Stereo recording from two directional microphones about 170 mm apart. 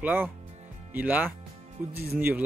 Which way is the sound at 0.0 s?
10° right (ahead or behind).